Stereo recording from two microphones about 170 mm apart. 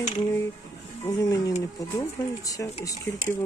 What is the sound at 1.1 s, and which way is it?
Speech, 20° left (ahead or behind).